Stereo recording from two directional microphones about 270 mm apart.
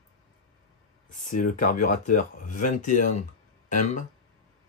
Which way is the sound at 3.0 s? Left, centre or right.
Left.